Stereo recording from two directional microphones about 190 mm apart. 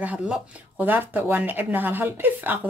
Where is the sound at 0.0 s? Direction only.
5° right (ahead or behind).